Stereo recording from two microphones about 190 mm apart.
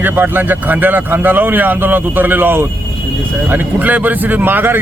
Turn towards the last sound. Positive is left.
turn(degrees=-10)  # may be behind; listen again after turning